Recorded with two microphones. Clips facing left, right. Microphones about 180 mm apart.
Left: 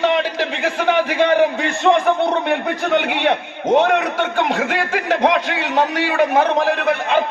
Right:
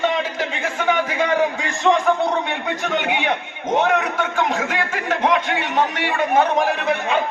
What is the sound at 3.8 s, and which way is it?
Speech, 70° left (ahead or behind).